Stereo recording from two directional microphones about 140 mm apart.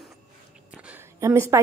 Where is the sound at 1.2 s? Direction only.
20° right (ahead or behind).